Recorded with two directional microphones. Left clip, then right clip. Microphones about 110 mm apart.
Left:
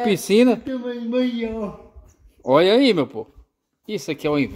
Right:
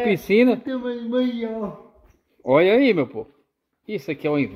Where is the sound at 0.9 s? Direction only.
5° left (ahead or behind).